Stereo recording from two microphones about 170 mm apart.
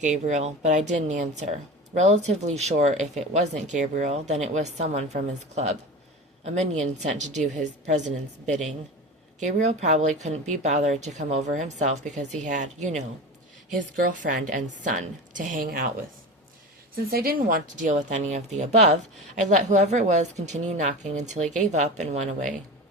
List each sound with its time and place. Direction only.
0.0 s speech: 45° right (ahead or behind)
6.4 s speech: 40° right (ahead or behind); by 15.9 s 55° right (ahead or behind)
16.9 s speech: 60° right (ahead or behind)